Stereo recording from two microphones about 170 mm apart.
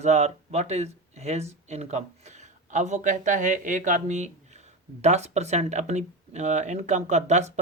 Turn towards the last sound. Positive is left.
turn(degrees=-40)  # may be behind; listen again after turning